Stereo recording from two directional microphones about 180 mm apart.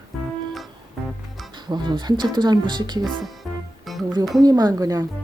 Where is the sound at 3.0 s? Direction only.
Centre (ahead or behind).